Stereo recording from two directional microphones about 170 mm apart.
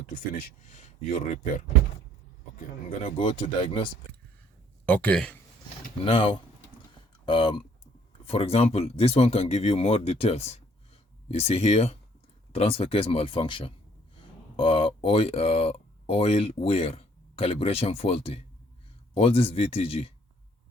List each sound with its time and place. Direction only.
0.7 s speech: 45° left (ahead or behind)
4.9 s speech: 10° left (ahead or behind)
6.1 s speech: 30° left (ahead or behind)